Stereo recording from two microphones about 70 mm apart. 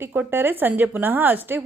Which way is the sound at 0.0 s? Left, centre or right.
Right.